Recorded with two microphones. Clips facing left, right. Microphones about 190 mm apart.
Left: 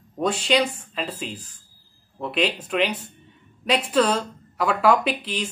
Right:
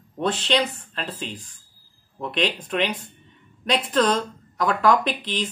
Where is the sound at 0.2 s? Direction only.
10° left (ahead or behind).